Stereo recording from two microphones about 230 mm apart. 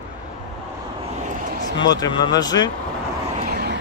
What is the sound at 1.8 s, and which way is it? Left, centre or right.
Speech, centre.